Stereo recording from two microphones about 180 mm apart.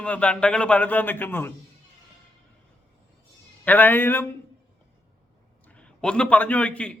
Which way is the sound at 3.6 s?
10° left (ahead or behind).